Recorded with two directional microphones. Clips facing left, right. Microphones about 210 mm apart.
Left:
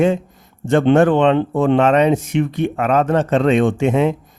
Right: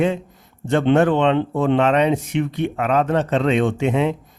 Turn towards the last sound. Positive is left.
turn(degrees=45)  # may be behind; listen again after turning